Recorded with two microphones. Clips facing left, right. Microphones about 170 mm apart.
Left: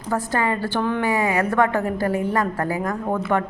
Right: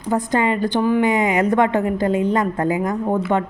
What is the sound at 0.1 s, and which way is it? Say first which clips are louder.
A woman's voice: right 4 dB; 20° right (ahead or behind).